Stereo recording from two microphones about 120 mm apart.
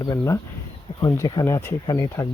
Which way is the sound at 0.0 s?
35° left (ahead or behind).